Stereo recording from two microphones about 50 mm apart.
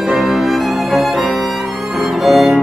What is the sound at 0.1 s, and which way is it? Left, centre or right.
Music, centre.